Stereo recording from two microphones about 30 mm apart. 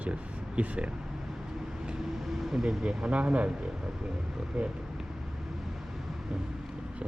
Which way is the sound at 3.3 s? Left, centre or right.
Right.